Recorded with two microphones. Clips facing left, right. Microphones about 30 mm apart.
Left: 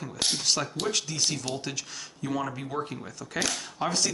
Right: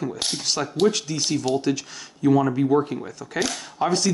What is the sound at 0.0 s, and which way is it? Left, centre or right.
Speech, centre.